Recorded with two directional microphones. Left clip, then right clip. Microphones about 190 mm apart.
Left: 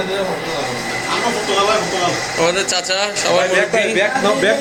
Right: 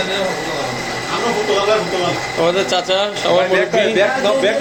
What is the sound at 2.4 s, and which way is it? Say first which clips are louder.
Speech: right 2 dB; 25° right (ahead or behind).